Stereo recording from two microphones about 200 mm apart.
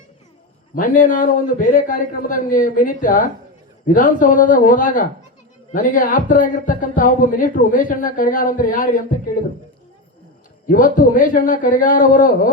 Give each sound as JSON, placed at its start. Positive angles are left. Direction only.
{"t": 0.8, "sound": "a man's voice", "side_deg": 40}
{"t": 10.7, "sound": "speech", "side_deg": 45}